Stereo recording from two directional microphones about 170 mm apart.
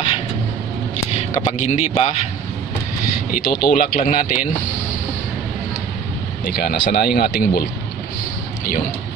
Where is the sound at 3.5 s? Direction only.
65° left (ahead or behind).